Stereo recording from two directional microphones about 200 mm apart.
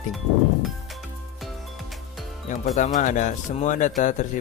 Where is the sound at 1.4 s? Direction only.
Centre (ahead or behind).